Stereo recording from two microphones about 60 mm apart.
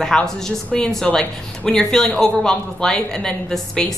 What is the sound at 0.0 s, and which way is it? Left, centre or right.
Speech, centre.